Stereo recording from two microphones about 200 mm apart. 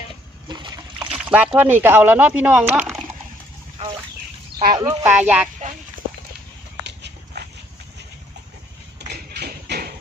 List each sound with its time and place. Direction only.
0.4 s splash: 20° right (ahead or behind)
1.1 s speech: 5° right (ahead or behind)
4.7 s speech: 15° right (ahead or behind)
6.8 s dog: 60° right (ahead or behind)
9.0 s tap: 55° right (ahead or behind)